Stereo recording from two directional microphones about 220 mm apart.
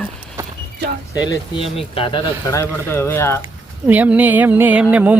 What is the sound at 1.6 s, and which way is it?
Speech, 25° left (ahead or behind).